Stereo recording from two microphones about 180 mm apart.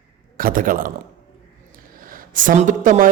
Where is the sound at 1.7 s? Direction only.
50° right (ahead or behind).